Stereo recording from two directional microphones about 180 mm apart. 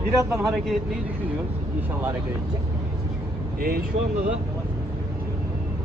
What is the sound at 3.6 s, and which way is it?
Speech, 55° right (ahead or behind).